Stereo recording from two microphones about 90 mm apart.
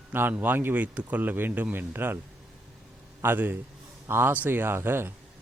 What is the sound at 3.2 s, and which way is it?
Speech, 20° right (ahead or behind).